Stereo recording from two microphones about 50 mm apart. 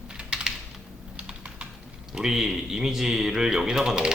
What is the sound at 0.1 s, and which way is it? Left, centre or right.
Typing, centre.